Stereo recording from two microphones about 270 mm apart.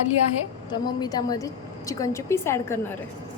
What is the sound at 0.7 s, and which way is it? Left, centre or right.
A woman's voice, centre.